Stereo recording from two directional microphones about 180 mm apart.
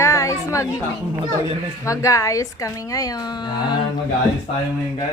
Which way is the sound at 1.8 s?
15° left (ahead or behind).